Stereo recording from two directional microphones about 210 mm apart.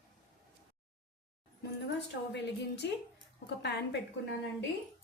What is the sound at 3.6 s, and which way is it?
Speech, 55° left (ahead or behind).